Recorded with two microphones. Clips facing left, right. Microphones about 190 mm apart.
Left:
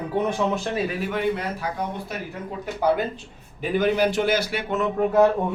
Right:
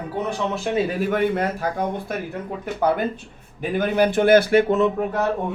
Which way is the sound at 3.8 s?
55° right (ahead or behind).